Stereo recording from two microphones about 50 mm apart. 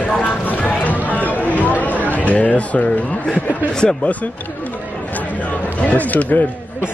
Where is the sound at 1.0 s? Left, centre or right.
Left.